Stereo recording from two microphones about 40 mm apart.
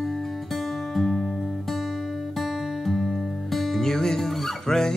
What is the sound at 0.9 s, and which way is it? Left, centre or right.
Music, centre.